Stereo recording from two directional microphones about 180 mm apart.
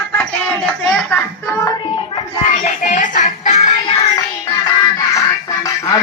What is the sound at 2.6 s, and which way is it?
Speech, 45° left (ahead or behind).